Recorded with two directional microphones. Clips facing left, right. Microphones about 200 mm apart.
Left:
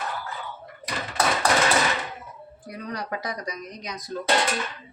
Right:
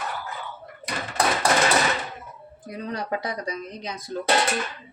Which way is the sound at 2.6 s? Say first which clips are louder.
Right 3 dB; 25° right (ahead or behind).